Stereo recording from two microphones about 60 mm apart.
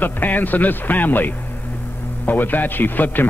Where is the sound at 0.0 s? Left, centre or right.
Left.